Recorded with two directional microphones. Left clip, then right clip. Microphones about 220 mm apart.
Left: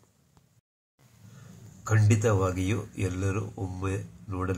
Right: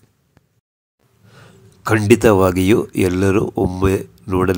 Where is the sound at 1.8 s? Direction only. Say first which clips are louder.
Right 15 dB; 45° right (ahead or behind).